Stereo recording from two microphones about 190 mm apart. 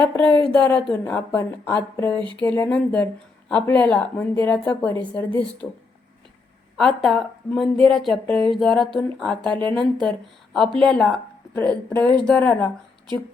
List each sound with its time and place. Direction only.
0.0 s a woman's voice: 5° left (ahead or behind)
2.1 s a sound: 25° right (ahead or behind)
2.4 s a woman's voice: 10° left (ahead or behind)
6.7 s a woman's voice: centre (ahead or behind)